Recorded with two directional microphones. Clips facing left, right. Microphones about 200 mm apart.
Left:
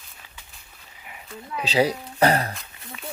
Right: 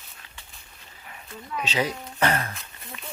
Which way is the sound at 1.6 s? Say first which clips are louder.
Left 6 dB; 35° left (ahead or behind).